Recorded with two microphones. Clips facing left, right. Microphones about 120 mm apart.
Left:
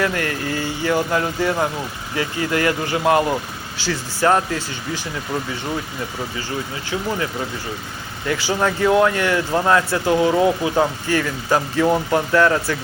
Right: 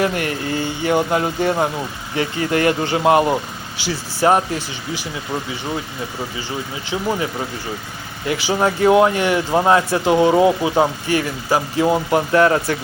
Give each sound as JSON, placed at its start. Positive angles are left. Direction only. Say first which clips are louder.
{"t": 0.0, "sound": "speech", "louder": "right 2 dB", "side_deg": -20}
{"t": 6.9, "sound": "speech", "louder": "right 2 dB", "side_deg": -20}
{"t": 8.3, "sound": "speech", "louder": "right 2 dB", "side_deg": -15}
{"t": 12.3, "sound": "speech", "louder": "right 2 dB", "side_deg": -25}